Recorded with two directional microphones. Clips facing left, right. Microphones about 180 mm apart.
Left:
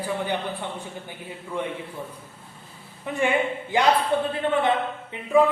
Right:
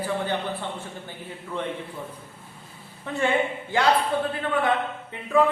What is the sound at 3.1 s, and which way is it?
A man's voice, 15° left (ahead or behind).